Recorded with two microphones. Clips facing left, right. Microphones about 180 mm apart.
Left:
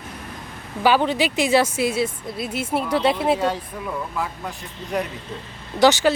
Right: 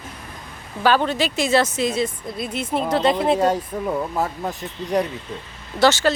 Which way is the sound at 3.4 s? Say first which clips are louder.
Right 4 dB; 40° right (ahead or behind).